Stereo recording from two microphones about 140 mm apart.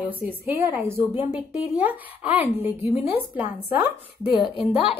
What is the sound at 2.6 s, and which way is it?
Speech, 45° left (ahead or behind).